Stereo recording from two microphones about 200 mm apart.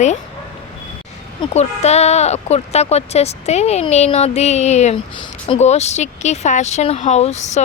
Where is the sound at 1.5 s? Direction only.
35° left (ahead or behind).